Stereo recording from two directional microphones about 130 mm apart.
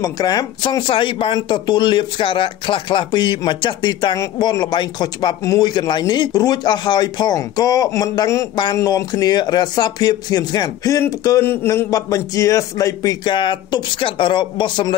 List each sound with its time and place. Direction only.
0.0 s speech: 30° left (ahead or behind)